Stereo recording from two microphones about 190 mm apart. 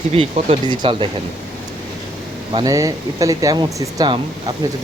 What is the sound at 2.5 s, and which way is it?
Speech, 20° right (ahead or behind).